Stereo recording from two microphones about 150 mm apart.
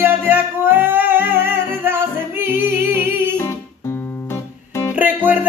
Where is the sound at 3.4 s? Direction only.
20° left (ahead or behind).